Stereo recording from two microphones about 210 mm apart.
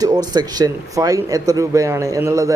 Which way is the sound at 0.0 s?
20° right (ahead or behind).